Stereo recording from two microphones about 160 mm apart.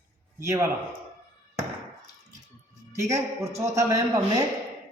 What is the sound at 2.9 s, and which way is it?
A man's voice, 20° right (ahead or behind).